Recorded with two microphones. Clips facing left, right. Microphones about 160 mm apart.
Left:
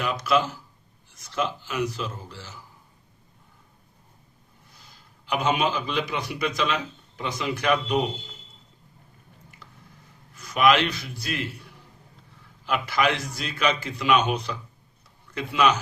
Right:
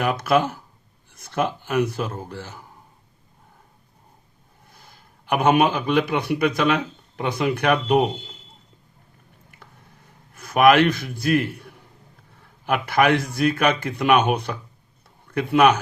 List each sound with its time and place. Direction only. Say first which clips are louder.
0.0 s a man's voice: right 4 dB; 55° right (ahead or behind)
4.7 s a man's voice: right 4 dB; 55° right (ahead or behind)
9.5 s a sound: right 3 dB; 55° right (ahead or behind)
10.3 s a man's voice: right 5 dB; 55° right (ahead or behind)